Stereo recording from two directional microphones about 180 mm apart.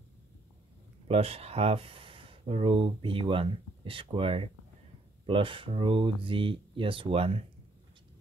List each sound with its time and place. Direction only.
1.0 s speech: 35° right (ahead or behind)